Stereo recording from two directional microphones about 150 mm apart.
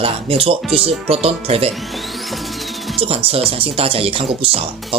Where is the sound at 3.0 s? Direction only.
40° right (ahead or behind).